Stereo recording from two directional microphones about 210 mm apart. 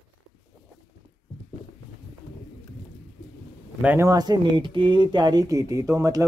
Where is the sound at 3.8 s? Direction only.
10° right (ahead or behind).